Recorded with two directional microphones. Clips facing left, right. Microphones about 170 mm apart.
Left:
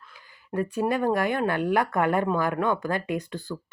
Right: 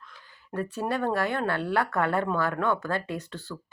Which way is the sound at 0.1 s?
10° left (ahead or behind).